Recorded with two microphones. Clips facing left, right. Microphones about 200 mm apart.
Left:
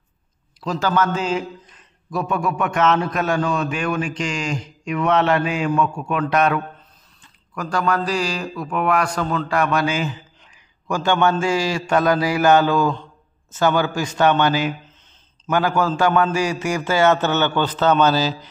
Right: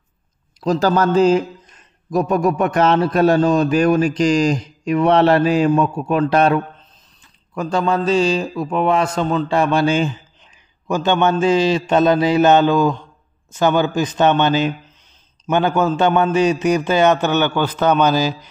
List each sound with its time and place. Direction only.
0.6 s a man's voice: 40° right (ahead or behind); by 18.5 s 15° right (ahead or behind)